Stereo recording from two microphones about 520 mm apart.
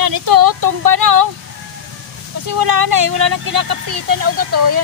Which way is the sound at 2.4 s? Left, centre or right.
Right.